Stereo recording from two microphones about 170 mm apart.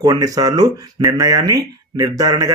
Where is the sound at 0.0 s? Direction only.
20° right (ahead or behind).